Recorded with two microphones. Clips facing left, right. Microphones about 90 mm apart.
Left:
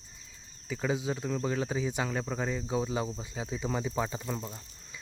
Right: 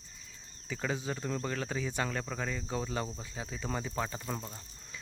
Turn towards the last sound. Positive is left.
turn(degrees=0)  # may be behind; listen again after turning